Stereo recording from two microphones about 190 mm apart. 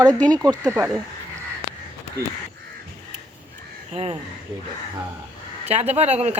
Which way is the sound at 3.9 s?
35° right (ahead or behind).